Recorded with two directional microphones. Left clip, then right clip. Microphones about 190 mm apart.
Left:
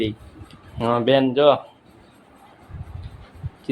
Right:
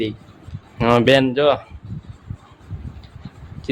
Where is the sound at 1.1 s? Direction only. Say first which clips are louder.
Left 3 dB; 10° right (ahead or behind).